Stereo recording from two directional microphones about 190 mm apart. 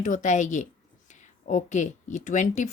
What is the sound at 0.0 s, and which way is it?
A woman's voice, 40° left (ahead or behind).